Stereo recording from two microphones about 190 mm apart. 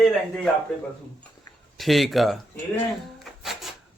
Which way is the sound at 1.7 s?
Centre (ahead or behind).